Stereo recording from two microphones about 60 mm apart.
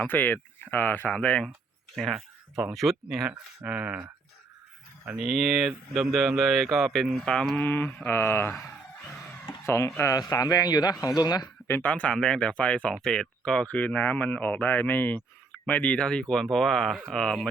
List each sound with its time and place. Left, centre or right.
0.0 s speech: left
1.1 s speech: centre
2.0 s speech: centre
3.2 s speech: right
5.1 s speech: centre
7.6 s speech: left
9.6 s speech: left
10.1 s speech: left
11.8 s speech: left
16.0 s speech: centre